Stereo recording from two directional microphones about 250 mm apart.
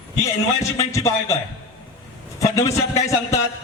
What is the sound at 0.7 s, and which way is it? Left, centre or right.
Speech, centre.